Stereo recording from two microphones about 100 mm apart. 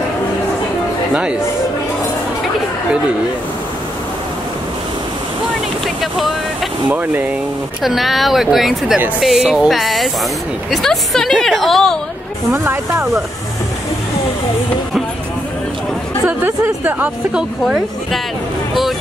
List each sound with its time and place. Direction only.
6.9 s a woman's voice: 15° right (ahead or behind)
7.8 s speech: centre (ahead or behind)
12.5 s speech: 30° right (ahead or behind)
16.3 s a woman's voice: 20° right (ahead or behind); by 18.2 s 5° right (ahead or behind)